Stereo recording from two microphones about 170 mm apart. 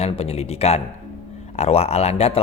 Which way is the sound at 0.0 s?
35° left (ahead or behind).